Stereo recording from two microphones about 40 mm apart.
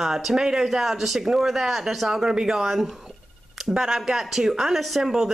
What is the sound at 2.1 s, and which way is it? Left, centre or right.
Speech, centre.